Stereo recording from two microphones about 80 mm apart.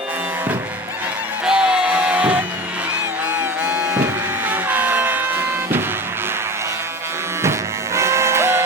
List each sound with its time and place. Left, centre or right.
1.5 s music: centre
3.2 s music: right
4.4 s vehicle: right
7.9 s music: right